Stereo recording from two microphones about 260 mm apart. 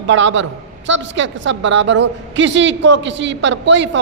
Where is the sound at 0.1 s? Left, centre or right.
Right.